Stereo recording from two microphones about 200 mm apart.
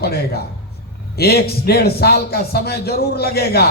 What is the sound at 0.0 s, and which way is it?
A man's voice, 50° left (ahead or behind).